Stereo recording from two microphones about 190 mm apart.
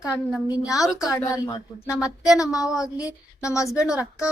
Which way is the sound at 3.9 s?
5° right (ahead or behind).